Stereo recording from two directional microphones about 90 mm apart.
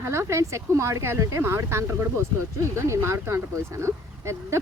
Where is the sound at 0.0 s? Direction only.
30° right (ahead or behind).